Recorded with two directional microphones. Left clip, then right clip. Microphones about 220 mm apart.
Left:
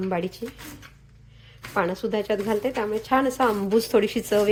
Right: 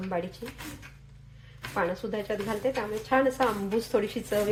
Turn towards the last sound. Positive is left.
turn(degrees=45)  # may be behind; listen again after turning